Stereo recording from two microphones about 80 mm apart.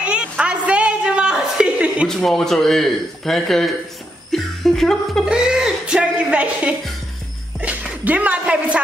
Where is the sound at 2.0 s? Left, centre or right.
Centre.